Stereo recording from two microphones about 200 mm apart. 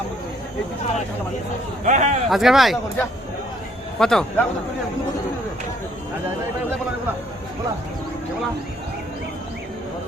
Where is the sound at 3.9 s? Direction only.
5° left (ahead or behind).